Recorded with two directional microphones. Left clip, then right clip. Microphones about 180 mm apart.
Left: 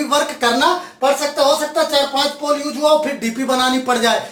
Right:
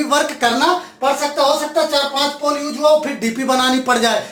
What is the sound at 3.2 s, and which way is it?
Speech, 30° right (ahead or behind).